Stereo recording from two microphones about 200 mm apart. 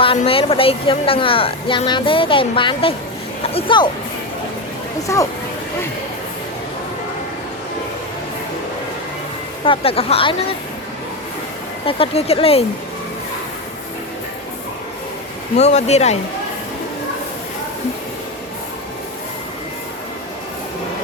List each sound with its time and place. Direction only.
0.2 s speech: 30° left (ahead or behind)
5.1 s speech: 15° left (ahead or behind)
9.6 s speech: 30° left (ahead or behind)
11.9 s speech: 30° left (ahead or behind)
15.5 s speech: 35° left (ahead or behind)